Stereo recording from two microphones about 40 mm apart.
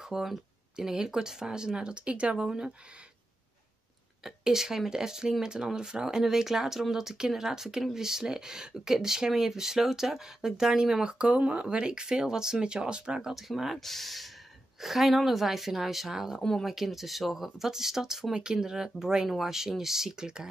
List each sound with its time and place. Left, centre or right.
0.0 s speech: centre; by 2.3 s right
4.2 s speech: centre; by 11.6 s right
11.7 s speech: right
13.3 s a woman's voice: centre
16.3 s speech: centre
16.6 s speech: centre